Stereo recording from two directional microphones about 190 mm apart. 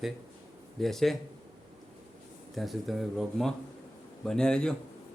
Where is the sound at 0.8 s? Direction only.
Centre (ahead or behind).